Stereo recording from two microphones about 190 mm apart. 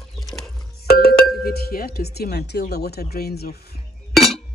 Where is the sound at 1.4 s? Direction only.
55° left (ahead or behind).